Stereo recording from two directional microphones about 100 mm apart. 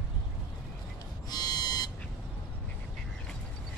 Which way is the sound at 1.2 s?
40° left (ahead or behind).